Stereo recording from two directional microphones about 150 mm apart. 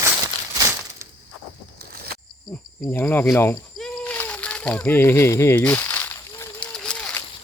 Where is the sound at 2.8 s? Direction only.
15° left (ahead or behind).